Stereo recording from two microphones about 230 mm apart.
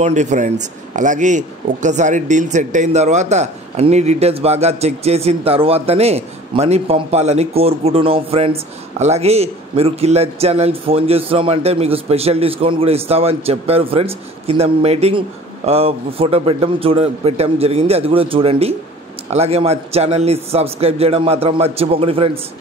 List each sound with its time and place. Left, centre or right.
0.0 s a man's voice: right